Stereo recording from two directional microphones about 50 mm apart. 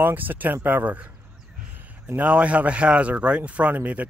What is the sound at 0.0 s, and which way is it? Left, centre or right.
Speech, right.